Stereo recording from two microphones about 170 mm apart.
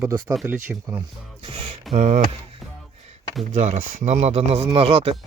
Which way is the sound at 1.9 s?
40° right (ahead or behind).